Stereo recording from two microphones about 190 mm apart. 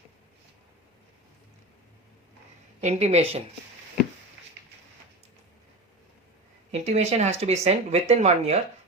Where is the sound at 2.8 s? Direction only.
35° right (ahead or behind).